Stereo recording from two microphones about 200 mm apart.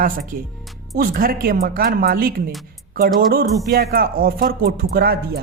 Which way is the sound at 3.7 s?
45° right (ahead or behind).